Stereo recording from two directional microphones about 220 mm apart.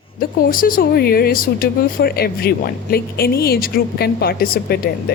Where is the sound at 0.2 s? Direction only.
40° left (ahead or behind).